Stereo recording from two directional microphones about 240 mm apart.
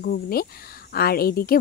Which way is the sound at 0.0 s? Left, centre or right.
Left.